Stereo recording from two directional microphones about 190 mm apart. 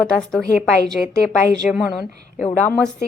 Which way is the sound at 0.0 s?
5° left (ahead or behind).